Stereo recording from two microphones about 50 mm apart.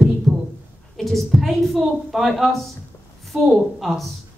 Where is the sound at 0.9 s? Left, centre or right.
Centre.